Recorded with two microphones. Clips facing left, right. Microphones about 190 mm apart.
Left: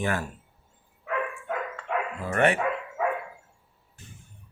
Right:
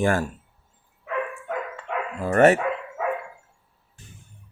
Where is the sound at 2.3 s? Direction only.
40° right (ahead or behind).